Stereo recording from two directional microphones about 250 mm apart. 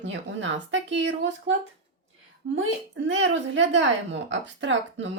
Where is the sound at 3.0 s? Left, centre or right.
Right.